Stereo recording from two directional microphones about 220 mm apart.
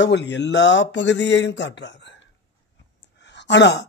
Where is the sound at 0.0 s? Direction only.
55° left (ahead or behind).